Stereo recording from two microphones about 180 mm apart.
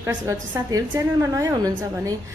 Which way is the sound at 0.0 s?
20° right (ahead or behind).